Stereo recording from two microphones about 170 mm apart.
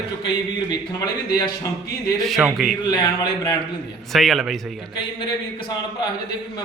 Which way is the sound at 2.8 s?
25° left (ahead or behind).